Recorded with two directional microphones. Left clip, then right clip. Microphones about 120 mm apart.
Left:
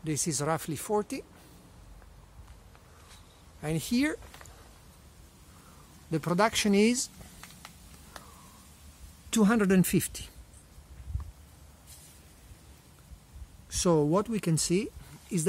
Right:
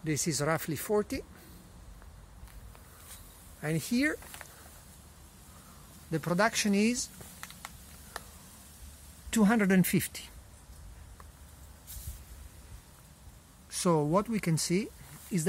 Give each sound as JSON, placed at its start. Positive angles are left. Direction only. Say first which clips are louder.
{"t": 0.0, "sound": "speech", "louder": "even", "side_deg": 5}
{"t": 3.6, "sound": "speech", "louder": "even", "side_deg": 25}
{"t": 3.9, "sound": "speech", "louder": "left 1 dB", "side_deg": 45}
{"t": 6.0, "sound": "speech", "louder": "left 2 dB", "side_deg": 55}
{"t": 9.3, "sound": "speech", "louder": "left 2 dB", "side_deg": 30}
{"t": 13.7, "sound": "a sound", "louder": "left 3 dB", "side_deg": 30}
{"t": 14.1, "sound": "speech", "louder": "left 1 dB", "side_deg": 30}